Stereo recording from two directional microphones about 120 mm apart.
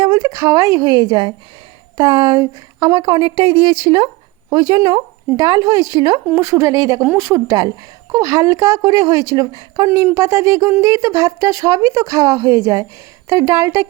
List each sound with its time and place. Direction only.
0.2 s a woman's voice: 35° right (ahead or behind)